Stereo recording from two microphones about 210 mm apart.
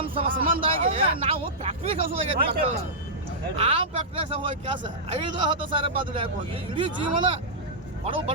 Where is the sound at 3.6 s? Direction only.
25° right (ahead or behind).